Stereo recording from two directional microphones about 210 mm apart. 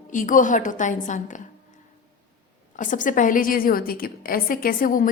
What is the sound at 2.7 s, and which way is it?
A woman's voice, 40° left (ahead or behind).